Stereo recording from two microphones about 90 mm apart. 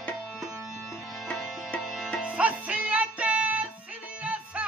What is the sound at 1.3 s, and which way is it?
Music, 15° left (ahead or behind).